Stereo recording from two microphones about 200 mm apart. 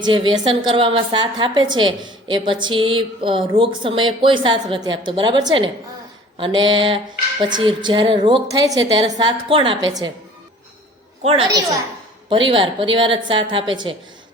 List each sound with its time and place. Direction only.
0.0 s a woman's voice: 25° right (ahead or behind)
11.2 s a woman's voice: 30° right (ahead or behind)